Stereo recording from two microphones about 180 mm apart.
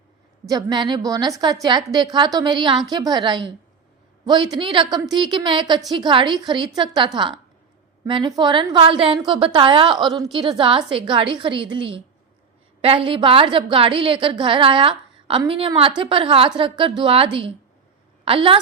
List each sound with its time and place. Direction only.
0.4 s a woman's voice: 20° right (ahead or behind)